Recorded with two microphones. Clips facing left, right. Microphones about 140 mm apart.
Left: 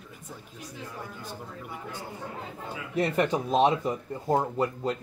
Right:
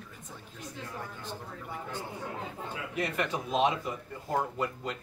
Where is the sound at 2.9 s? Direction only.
35° left (ahead or behind).